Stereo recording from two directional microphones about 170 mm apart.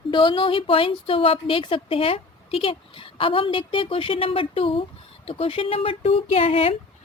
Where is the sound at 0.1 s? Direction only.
30° left (ahead or behind).